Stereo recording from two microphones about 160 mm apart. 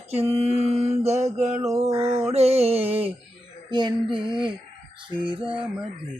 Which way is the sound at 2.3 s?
40° right (ahead or behind).